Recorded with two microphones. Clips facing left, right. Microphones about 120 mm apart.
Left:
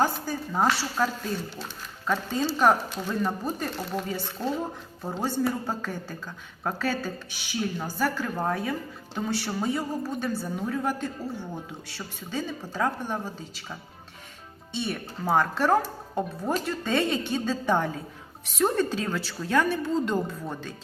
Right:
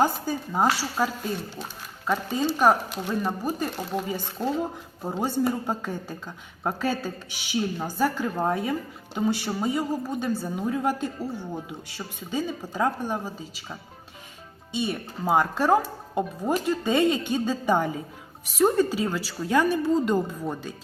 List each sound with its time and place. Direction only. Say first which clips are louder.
0.0 s a woman's voice: right 2 dB; 15° right (ahead or behind)